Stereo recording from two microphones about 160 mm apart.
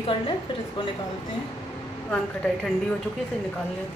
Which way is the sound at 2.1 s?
5° left (ahead or behind).